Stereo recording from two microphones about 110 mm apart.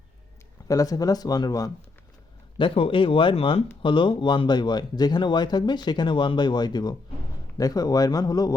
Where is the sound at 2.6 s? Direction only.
55° left (ahead or behind).